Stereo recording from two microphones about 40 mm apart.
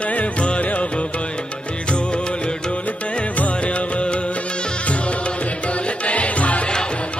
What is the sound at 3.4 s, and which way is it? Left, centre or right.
Music, left.